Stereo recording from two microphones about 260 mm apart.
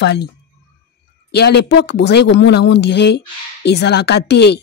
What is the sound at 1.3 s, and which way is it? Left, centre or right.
Speech, left.